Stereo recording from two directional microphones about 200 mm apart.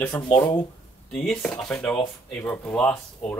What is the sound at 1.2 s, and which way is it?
Speech, 5° left (ahead or behind).